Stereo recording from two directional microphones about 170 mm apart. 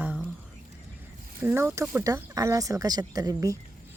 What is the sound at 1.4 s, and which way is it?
Speech, 10° right (ahead or behind).